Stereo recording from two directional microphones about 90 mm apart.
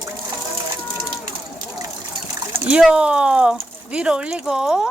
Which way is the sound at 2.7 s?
10° right (ahead or behind).